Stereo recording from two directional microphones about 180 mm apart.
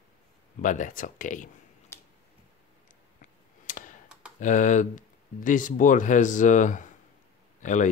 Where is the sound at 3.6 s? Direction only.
45° left (ahead or behind).